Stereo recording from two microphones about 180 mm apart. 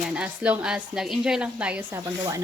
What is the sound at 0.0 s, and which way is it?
A woman's voice, 5° right (ahead or behind).